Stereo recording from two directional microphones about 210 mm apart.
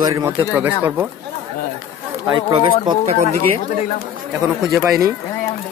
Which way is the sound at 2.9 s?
30° right (ahead or behind).